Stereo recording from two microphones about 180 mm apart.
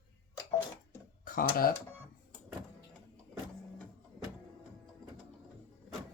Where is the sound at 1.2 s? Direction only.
50° left (ahead or behind).